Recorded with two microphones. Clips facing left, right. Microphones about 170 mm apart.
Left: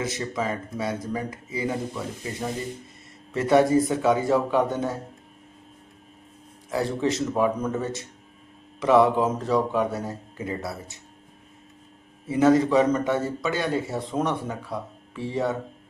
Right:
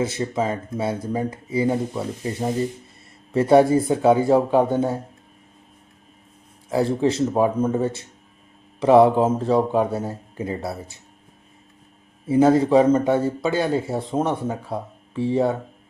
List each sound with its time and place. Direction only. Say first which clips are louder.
0.0 s a man's voice: right 5 dB; 30° right (ahead or behind)
6.7 s speech: right 5 dB; 30° right (ahead or behind)
12.3 s a man's voice: right 3 dB; 30° right (ahead or behind)